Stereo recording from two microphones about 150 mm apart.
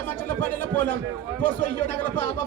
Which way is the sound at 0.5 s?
10° left (ahead or behind).